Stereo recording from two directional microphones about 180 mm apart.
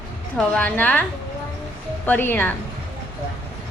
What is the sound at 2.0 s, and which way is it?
Speech, 10° left (ahead or behind).